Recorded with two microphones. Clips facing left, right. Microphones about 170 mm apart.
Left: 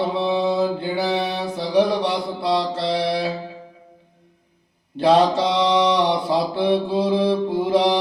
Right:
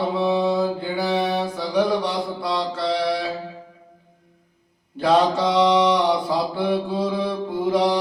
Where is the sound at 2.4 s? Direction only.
25° left (ahead or behind).